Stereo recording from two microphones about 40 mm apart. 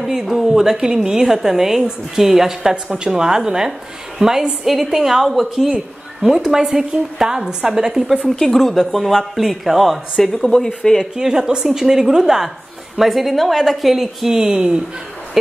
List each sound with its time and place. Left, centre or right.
0.0 s a woman's voice: centre
8.4 s speech: centre
11.0 s a woman's voice: centre
13.0 s speech: centre
14.5 s speech: right